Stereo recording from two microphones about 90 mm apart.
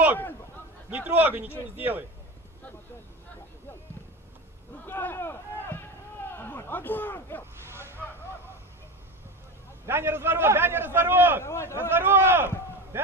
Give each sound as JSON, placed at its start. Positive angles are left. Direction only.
{"t": 0.8, "sound": "a man's voice", "side_deg": -20}
{"t": 4.8, "sound": "speech", "side_deg": 25}
{"t": 7.7, "sound": "vehicle", "side_deg": -25}
{"t": 9.8, "sound": "a man's voice", "side_deg": -25}
{"t": 11.4, "sound": "speech", "side_deg": 30}
{"t": 11.9, "sound": "a man's voice", "side_deg": -25}